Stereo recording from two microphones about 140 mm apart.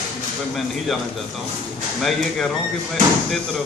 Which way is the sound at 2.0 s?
Centre (ahead or behind).